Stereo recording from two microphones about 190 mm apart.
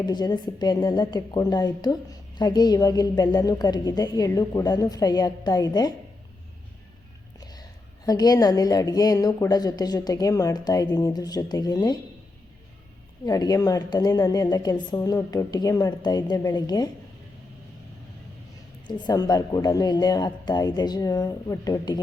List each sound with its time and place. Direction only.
0.0 s a woman's voice: 20° left (ahead or behind)
7.3 s a sound: 20° left (ahead or behind)
8.0 s a woman's voice: 20° left (ahead or behind)
13.2 s a woman's voice: 20° left (ahead or behind)
18.9 s a woman's voice: 25° left (ahead or behind)